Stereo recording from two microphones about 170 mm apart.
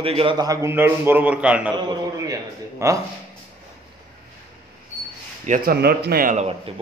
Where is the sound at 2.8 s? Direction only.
15° right (ahead or behind).